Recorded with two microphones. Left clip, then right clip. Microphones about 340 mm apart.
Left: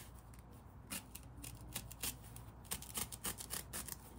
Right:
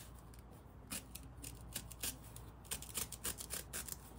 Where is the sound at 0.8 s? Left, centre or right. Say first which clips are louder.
Even; centre.